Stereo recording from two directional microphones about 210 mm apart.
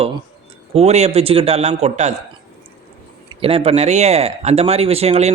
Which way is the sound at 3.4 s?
25° right (ahead or behind).